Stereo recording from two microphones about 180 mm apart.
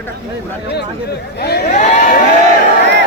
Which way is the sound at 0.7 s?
65° left (ahead or behind).